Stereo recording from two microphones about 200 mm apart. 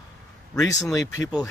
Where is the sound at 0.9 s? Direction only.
15° left (ahead or behind).